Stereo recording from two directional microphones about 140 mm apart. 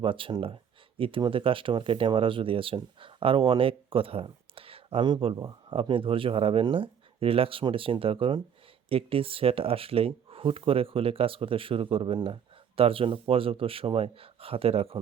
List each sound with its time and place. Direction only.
0.0 s speech: 40° right (ahead or behind)